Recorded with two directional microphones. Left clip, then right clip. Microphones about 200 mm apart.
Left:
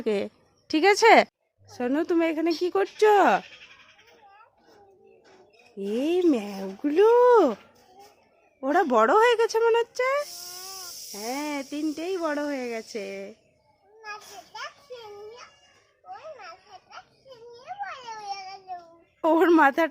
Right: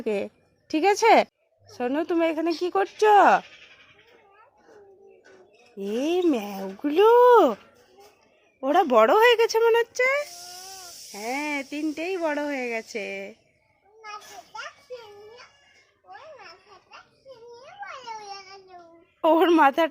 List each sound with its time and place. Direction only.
0.0 s a woman's voice: 10° left (ahead or behind)
5.7 s speech: 10° left (ahead or behind)
8.6 s speech: 10° left (ahead or behind)
10.5 s a sound: 40° right (ahead or behind)
11.1 s speech: centre (ahead or behind)
19.2 s speech: 10° left (ahead or behind)